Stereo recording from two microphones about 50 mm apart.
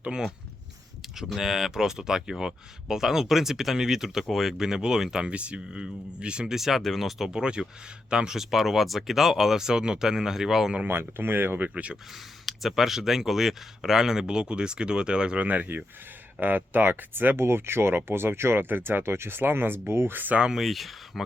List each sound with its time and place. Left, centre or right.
0.0 s speech: centre
5.2 s speech: right; by 7.1 s centre
7.2 s speech: centre
10.8 s speech: right
11.7 s speech: right
12.5 s speech: centre
15.4 s speech: right
17.3 s speech: right
20.5 s speech: centre